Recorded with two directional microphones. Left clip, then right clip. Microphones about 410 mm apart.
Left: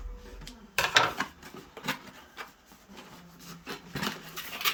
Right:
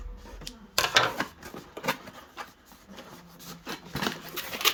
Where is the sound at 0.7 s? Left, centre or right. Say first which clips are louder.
Right 1 dB; centre.